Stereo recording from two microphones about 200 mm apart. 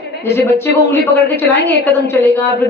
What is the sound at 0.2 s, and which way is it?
A woman's voice, 10° left (ahead or behind).